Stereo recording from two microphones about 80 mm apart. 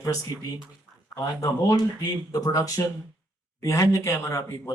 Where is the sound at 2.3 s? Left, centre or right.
Left.